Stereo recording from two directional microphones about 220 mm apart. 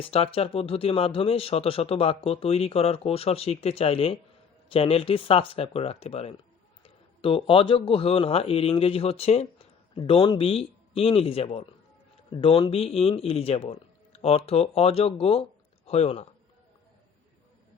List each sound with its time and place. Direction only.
0.0 s a man's voice: 25° left (ahead or behind)